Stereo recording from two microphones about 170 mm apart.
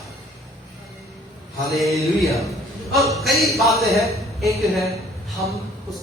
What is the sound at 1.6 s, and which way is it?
A man's voice, centre (ahead or behind).